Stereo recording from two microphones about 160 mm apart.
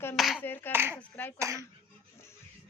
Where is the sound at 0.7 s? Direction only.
15° right (ahead or behind).